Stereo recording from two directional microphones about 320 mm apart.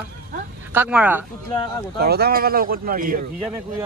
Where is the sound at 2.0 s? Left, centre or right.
Right.